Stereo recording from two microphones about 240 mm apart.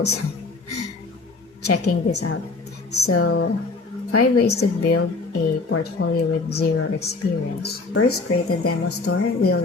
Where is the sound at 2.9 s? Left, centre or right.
Left.